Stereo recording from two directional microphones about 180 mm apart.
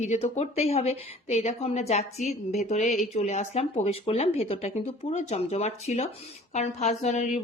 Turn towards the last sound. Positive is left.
turn(degrees=40)  # may be behind; listen again after turning